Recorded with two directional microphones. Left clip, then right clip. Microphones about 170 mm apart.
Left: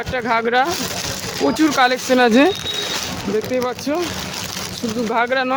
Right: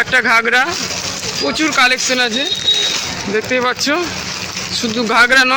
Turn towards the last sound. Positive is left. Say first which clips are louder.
# right 8 dB
turn(degrees=5)  # may be behind; listen again after turning